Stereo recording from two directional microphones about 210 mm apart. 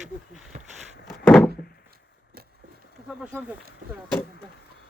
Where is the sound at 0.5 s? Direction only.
35° right (ahead or behind).